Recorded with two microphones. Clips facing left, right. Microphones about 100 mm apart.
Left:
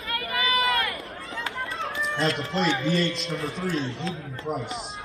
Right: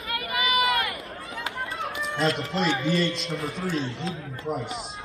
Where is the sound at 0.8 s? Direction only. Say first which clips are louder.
Left 1 dB; 30° left (ahead or behind).